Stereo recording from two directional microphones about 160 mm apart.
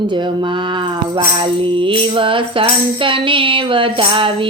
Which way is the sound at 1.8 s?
35° right (ahead or behind).